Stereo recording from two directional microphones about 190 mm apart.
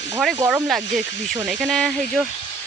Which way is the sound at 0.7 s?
Centre (ahead or behind).